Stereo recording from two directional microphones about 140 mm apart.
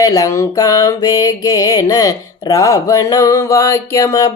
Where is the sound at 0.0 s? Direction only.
25° left (ahead or behind).